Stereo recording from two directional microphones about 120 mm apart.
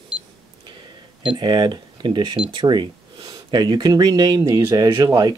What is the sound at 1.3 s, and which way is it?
Speech, 40° right (ahead or behind).